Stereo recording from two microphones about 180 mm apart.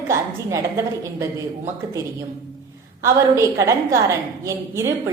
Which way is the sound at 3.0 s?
15° right (ahead or behind).